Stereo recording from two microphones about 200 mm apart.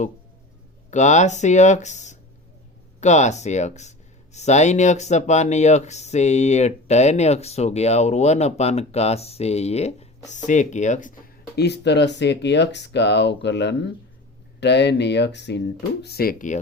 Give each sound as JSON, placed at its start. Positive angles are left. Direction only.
{"t": 0.9, "sound": "speech", "side_deg": 35}
{"t": 11.5, "sound": "speech", "side_deg": 55}